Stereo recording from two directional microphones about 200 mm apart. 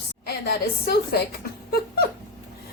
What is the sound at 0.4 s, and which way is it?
Speech, 55° left (ahead or behind).